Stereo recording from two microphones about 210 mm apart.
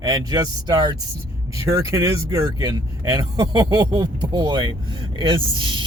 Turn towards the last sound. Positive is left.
turn(degrees=-20)  # may be behind; listen again after turning